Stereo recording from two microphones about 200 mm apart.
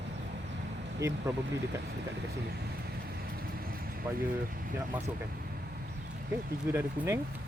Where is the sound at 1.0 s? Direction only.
15° right (ahead or behind).